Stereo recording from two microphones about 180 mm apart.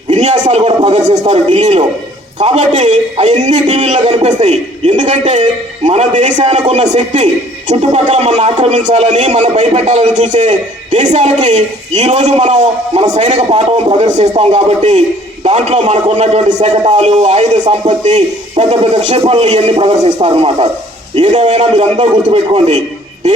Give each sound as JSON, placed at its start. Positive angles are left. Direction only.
{"t": 0.1, "sound": "a sound", "side_deg": -40}
{"t": 0.5, "sound": "speech", "side_deg": -30}
{"t": 1.3, "sound": "a man's voice", "side_deg": -35}